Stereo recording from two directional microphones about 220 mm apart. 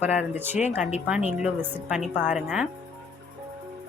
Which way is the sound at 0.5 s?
30° left (ahead or behind).